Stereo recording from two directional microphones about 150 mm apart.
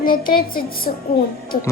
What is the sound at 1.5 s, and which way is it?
Speech, 50° left (ahead or behind).